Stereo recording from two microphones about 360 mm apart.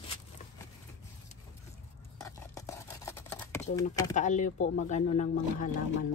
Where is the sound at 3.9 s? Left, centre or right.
Centre.